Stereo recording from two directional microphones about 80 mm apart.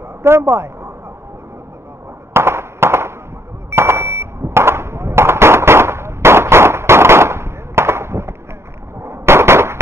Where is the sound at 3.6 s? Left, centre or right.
Right.